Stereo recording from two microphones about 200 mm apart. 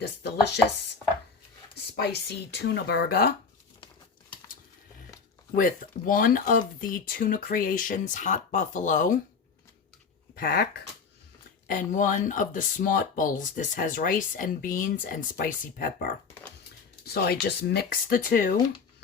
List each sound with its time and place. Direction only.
0.0 s speech: 55° left (ahead or behind)
2.0 s speech: 55° left (ahead or behind)
5.5 s speech: 45° left (ahead or behind)
10.3 s speech: 50° left (ahead or behind)
11.7 s speech: 40° left (ahead or behind)